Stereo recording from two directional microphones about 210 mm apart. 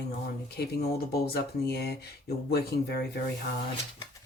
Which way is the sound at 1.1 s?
50° left (ahead or behind).